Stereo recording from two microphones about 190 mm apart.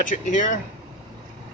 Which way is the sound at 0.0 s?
40° left (ahead or behind).